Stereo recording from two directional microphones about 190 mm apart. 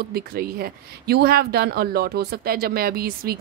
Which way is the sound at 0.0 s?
55° right (ahead or behind).